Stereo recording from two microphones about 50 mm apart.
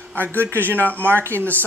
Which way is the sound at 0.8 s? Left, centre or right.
Left.